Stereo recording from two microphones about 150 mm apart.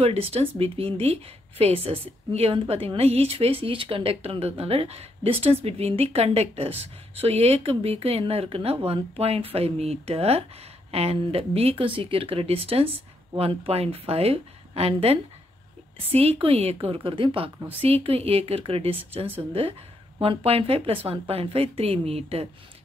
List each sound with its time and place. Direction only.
0.0 s a woman's voice: 40° right (ahead or behind)